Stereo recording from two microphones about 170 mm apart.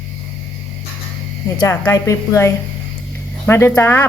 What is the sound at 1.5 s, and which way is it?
Speech, 15° left (ahead or behind).